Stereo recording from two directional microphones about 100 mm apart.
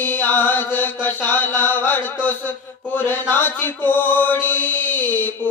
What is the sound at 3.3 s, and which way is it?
Mantra, 20° left (ahead or behind).